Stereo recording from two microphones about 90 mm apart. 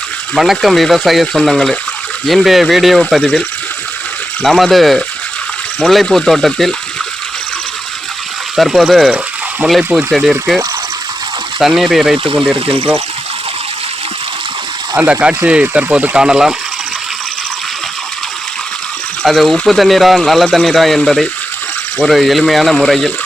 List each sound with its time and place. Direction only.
0.3 s speech: centre (ahead or behind)
4.4 s speech: centre (ahead or behind)
8.5 s speech: centre (ahead or behind)
11.6 s speech: 5° right (ahead or behind)
12.1 s speech: 80° right
14.9 s speech: 15° right (ahead or behind)
19.2 s speech: centre (ahead or behind)